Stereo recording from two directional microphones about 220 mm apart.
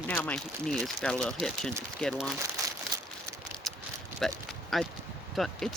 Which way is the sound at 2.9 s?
15° right (ahead or behind).